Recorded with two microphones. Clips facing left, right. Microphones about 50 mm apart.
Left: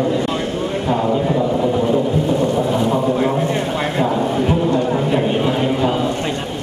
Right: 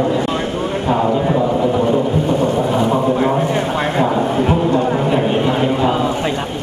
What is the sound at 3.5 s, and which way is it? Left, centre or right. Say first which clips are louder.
Vehicle: right 2 dB; centre.